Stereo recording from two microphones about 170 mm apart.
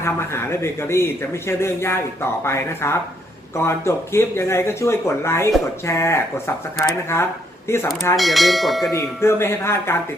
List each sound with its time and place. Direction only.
0.0 s speech: 15° left (ahead or behind)
8.1 s bell: centre (ahead or behind)
8.9 s speech: 15° left (ahead or behind)